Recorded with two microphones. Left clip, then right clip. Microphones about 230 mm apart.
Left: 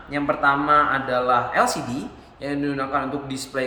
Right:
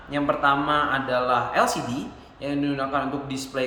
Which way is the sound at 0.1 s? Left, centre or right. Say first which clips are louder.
Left 1 dB; centre.